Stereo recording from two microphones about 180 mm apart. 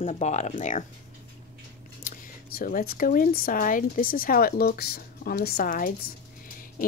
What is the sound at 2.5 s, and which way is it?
Speech, 50° left (ahead or behind).